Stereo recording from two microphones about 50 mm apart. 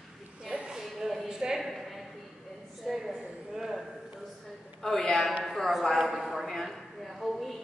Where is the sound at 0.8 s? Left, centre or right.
Centre.